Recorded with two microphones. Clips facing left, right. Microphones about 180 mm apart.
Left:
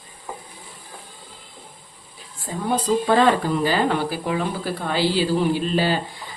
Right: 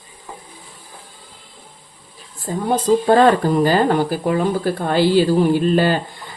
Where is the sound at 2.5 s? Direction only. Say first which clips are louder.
Right 6 dB; 45° right (ahead or behind).